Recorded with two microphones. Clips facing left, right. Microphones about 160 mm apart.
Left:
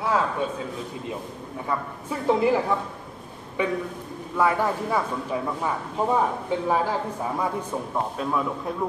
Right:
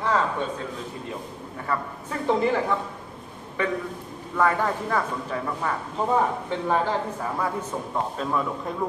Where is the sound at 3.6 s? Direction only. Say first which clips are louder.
Left 1 dB; 15° left (ahead or behind).